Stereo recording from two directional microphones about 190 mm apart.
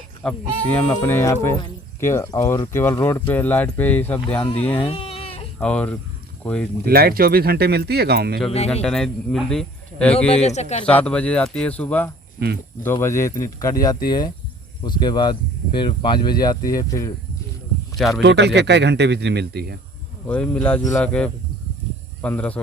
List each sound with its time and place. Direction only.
0.2 s speech: 5° left (ahead or behind)
4.9 s a sound: 30° left (ahead or behind)
5.5 s speech: 5° left (ahead or behind)
6.8 s speech: 55° right (ahead or behind)
8.4 s speech: 35° left (ahead or behind)
8.7 s speech: 5° left (ahead or behind)
10.3 s speech: 35° left (ahead or behind)
10.8 s speech: 5° left (ahead or behind)
17.9 s speech: centre (ahead or behind)
18.2 s speech: 65° right (ahead or behind)
20.2 s speech: 5° left (ahead or behind)